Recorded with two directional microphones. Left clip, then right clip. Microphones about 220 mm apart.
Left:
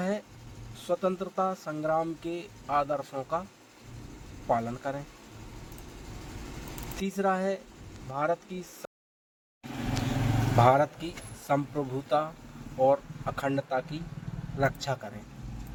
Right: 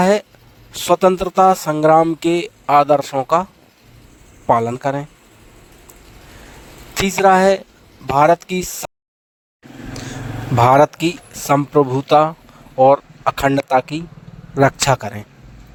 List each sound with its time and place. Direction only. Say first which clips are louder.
0.0 s speech: right 18 dB; 50° right (ahead or behind)
4.4 s speech: right 14 dB; 50° right (ahead or behind)
7.2 s speech: right 17 dB; 50° right (ahead or behind)
10.6 s speech: right 12 dB; 50° right (ahead or behind)